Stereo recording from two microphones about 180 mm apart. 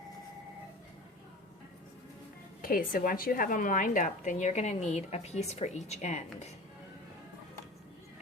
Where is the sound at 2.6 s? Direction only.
55° left (ahead or behind).